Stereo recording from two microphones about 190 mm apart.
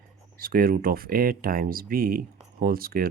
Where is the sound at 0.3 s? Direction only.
50° right (ahead or behind).